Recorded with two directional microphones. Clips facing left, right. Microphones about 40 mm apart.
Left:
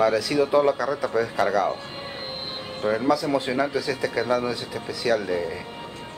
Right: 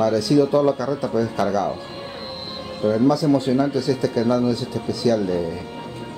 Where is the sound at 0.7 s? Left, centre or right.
Centre.